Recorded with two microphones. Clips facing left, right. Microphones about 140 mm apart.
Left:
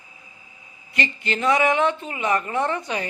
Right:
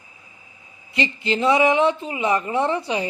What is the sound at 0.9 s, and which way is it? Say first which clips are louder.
Speech: right 3 dB; 25° right (ahead or behind).